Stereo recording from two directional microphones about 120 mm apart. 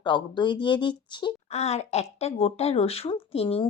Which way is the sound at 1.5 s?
65° left (ahead or behind).